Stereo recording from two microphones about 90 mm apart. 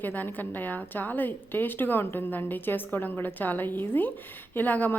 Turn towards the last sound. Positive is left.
turn(degrees=20)  # may be behind; listen again after turning